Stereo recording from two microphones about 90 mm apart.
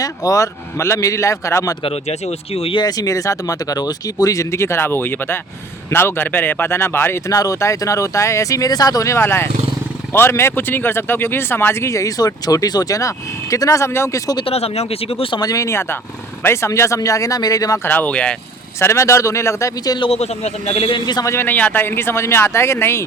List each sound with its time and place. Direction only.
0.0 s speech: 40° left (ahead or behind)
2.5 s speech: 90° left
2.8 s speech: 40° left (ahead or behind)
7.3 s speech: 40° left (ahead or behind)
9.1 s speech: 25° left (ahead or behind)
14.4 s speech: 90° left
15.4 s speech: 40° left (ahead or behind)
17.8 s speech: 20° left (ahead or behind)
18.8 s speech: 30° left (ahead or behind)
20.7 s a man's voice: 85° left
21.2 s speech: 25° left (ahead or behind)